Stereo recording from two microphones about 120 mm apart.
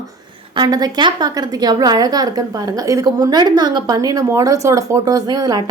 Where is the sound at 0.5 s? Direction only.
35° right (ahead or behind).